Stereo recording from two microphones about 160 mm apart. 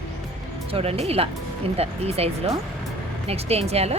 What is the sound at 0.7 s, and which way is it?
Speech, 40° right (ahead or behind).